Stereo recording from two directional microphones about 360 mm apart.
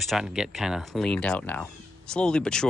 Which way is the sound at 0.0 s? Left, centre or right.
Centre.